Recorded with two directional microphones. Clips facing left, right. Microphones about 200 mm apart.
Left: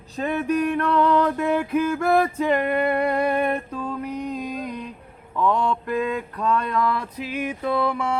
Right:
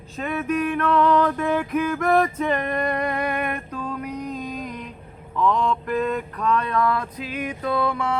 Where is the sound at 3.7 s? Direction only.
5° left (ahead or behind).